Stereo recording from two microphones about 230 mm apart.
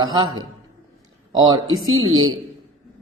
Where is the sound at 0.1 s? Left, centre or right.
Centre.